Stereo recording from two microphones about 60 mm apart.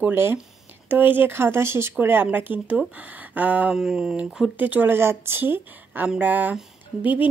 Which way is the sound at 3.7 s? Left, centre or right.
Centre.